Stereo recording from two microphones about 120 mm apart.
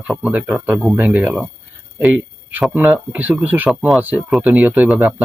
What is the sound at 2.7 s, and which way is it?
Speech, 15° right (ahead or behind).